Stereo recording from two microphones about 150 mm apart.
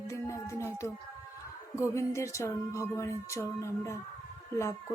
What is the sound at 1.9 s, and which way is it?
Music, 20° left (ahead or behind).